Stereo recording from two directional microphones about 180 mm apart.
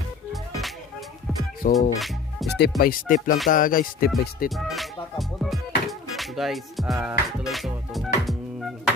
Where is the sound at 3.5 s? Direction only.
50° left (ahead or behind).